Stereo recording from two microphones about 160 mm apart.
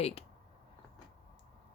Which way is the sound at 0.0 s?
35° left (ahead or behind).